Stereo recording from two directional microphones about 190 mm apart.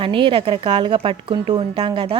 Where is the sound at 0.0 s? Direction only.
25° right (ahead or behind).